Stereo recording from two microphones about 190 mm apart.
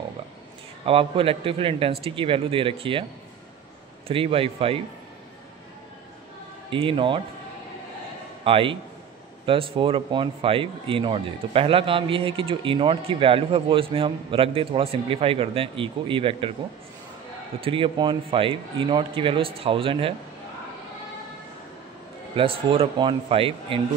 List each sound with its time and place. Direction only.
0.8 s speech: 30° right (ahead or behind)
4.1 s speech: 30° right (ahead or behind)
6.7 s speech: 25° right (ahead or behind)
8.5 s speech: 30° right (ahead or behind)
17.6 s speech: 30° right (ahead or behind)
22.3 s speech: 30° right (ahead or behind)